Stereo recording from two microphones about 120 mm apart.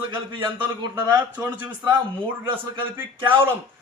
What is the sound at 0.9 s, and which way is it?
Speech, 15° right (ahead or behind).